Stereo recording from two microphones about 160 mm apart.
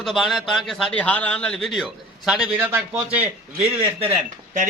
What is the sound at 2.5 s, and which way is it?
Speech, 15° right (ahead or behind).